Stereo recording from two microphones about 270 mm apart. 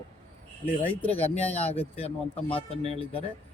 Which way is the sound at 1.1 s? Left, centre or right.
Left.